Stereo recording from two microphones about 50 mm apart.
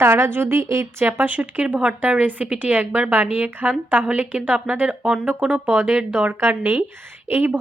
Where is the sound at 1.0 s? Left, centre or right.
Right.